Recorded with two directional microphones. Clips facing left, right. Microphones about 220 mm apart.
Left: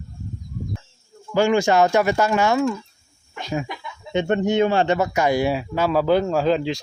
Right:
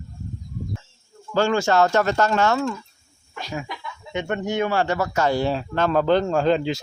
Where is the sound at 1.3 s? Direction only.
15° left (ahead or behind).